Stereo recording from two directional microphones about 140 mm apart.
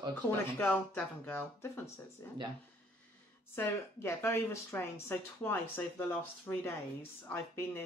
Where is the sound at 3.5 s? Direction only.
20° left (ahead or behind).